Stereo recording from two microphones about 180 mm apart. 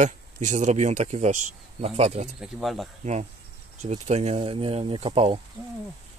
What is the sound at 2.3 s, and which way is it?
Speech, centre (ahead or behind).